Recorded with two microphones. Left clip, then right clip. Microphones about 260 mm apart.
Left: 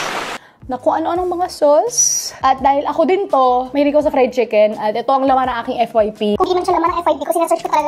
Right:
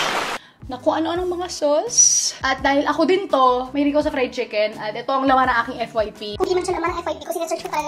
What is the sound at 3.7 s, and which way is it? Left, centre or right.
A woman's voice, left.